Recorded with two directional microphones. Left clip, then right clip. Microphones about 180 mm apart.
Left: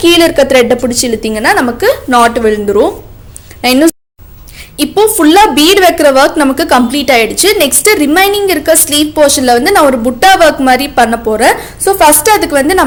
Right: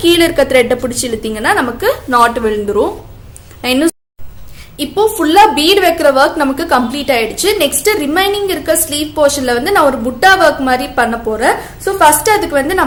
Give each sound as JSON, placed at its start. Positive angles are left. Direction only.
{"t": 0.0, "sound": "a woman's voice", "side_deg": 25}